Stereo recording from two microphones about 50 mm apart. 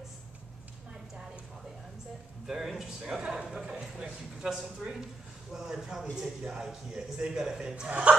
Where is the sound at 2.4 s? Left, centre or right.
Centre.